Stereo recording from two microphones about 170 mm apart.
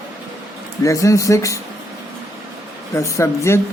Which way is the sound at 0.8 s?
20° left (ahead or behind).